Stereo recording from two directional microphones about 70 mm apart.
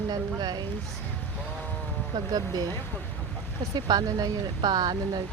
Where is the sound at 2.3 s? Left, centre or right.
Right.